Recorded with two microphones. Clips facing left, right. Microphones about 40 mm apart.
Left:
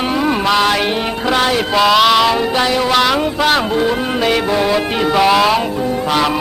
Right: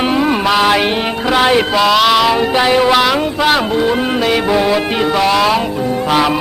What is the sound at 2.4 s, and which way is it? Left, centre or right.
Mantra, centre.